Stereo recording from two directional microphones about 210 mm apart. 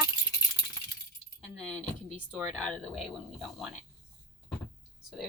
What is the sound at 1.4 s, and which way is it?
Speech, 5° left (ahead or behind).